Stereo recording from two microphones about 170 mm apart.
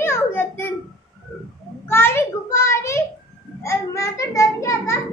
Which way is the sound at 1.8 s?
15° left (ahead or behind).